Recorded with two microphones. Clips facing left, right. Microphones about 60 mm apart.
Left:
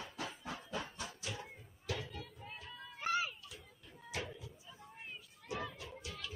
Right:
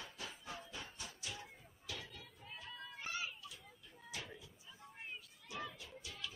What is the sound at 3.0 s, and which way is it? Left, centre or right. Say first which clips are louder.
Children playing: left 9 dB; left.